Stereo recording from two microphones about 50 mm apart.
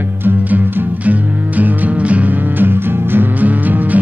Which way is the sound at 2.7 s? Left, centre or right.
Right.